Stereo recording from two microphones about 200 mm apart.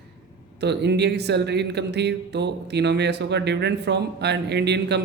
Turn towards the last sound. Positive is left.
turn(degrees=-60)  # may be behind; listen again after turning